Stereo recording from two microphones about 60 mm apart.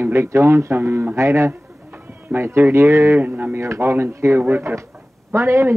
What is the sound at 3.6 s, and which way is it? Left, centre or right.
Speech, right.